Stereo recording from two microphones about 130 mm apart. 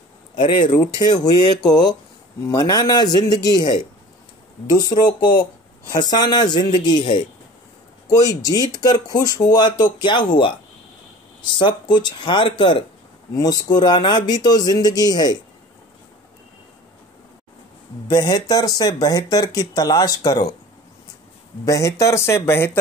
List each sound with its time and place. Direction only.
0.7 s speech: 30° left (ahead or behind)
11.5 s speech: 35° left (ahead or behind)
18.0 s speech: 30° left (ahead or behind)
21.6 s speech: 25° left (ahead or behind)